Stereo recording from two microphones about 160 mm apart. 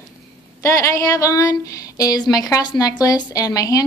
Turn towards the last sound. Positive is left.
turn(degrees=20)  # may be behind; listen again after turning